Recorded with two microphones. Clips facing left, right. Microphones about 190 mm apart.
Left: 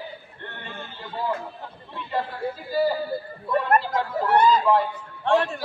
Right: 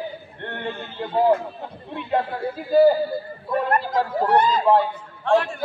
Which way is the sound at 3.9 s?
40° right (ahead or behind).